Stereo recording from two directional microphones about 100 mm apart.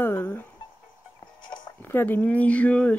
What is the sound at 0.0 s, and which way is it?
Speech, 25° left (ahead or behind).